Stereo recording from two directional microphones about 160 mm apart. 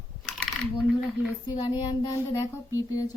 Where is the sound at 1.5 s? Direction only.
30° left (ahead or behind).